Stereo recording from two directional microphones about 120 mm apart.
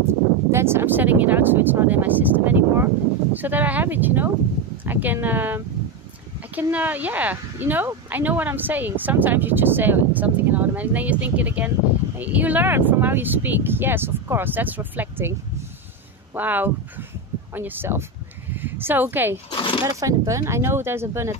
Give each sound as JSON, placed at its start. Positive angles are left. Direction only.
{"t": 0.5, "sound": "speech", "side_deg": -20}
{"t": 16.3, "sound": "speech", "side_deg": -15}
{"t": 18.5, "sound": "a sound", "side_deg": -15}
{"t": 19.5, "sound": "speech", "side_deg": 45}
{"t": 19.8, "sound": "speech", "side_deg": -25}